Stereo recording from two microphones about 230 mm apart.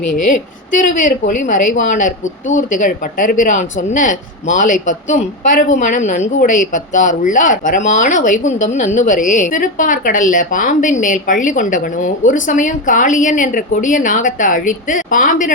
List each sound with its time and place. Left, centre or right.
0.1 s a woman's voice: left